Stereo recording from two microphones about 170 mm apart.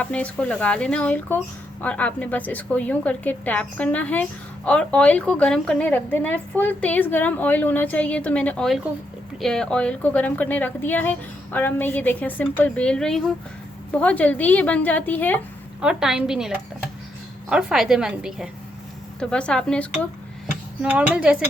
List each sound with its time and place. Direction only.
0.0 s speech: 5° left (ahead or behind)
15.8 s a woman's voice: 5° right (ahead or behind)
20.8 s speech: 5° right (ahead or behind)